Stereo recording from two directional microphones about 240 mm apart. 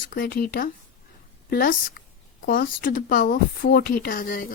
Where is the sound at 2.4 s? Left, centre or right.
Left.